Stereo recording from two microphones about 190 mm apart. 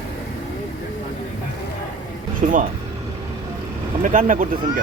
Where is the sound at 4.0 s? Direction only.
45° right (ahead or behind).